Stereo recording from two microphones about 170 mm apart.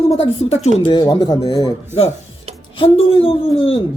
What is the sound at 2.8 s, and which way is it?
Speech, 30° left (ahead or behind).